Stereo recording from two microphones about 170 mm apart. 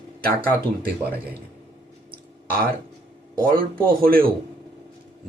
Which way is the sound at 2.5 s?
60° right (ahead or behind).